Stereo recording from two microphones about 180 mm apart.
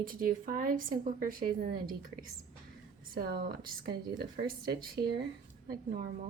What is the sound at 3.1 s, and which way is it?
A woman's voice, 55° right (ahead or behind).